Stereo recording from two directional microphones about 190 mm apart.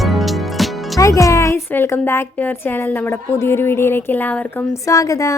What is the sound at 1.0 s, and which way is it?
A woman's voice, 15° left (ahead or behind).